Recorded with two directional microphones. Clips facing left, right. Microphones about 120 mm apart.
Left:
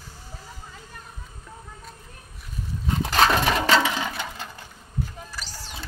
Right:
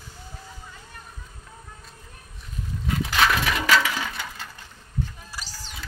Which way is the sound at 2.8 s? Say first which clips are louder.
Left 2 dB; 35° left (ahead or behind).